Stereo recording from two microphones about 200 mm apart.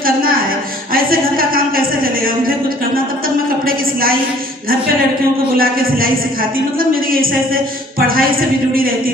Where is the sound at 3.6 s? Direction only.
45° right (ahead or behind).